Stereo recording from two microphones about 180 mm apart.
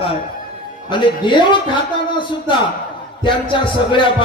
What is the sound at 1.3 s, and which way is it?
Speech, 25° left (ahead or behind).